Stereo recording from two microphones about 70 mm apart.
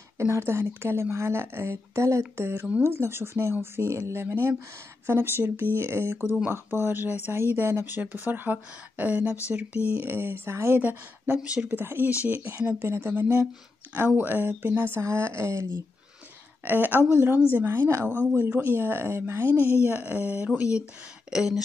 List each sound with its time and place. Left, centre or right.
0.2 s speech: right
10.0 s speech: right
11.4 s speech: centre
11.8 s speech: right
12.8 s speech: right
15.0 s speech: right
16.6 s speech: right
18.2 s speech: centre; by 19.5 s right
19.7 s speech: right; by 21.5 s centre